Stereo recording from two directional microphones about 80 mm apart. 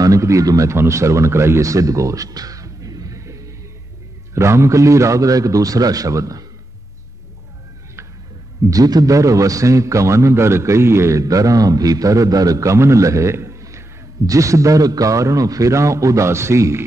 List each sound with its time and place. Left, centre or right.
0.0 s a man's voice: right
8.6 s a man's voice: right